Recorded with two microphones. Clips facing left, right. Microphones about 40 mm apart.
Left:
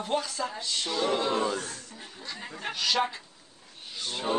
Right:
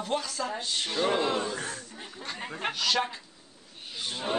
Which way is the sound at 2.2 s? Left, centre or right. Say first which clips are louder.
Right 4 dB; right.